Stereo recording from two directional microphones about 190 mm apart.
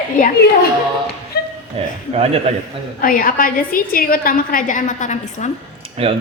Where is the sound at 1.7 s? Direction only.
30° right (ahead or behind).